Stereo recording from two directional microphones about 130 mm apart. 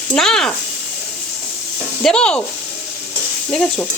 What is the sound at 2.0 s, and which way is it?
Sizzle, 5° left (ahead or behind).